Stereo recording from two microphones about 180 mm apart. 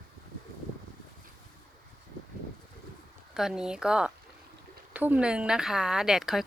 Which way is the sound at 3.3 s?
5° right (ahead or behind).